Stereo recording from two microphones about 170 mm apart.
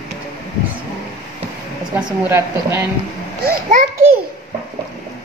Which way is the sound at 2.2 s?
15° right (ahead or behind).